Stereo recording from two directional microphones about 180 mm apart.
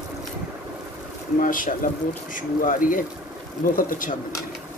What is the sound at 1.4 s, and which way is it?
Speech, 50° left (ahead or behind).